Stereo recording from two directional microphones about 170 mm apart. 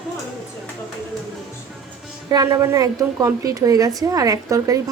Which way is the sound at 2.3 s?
20° right (ahead or behind).